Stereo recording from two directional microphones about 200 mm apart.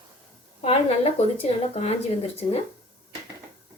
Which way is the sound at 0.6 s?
30° left (ahead or behind).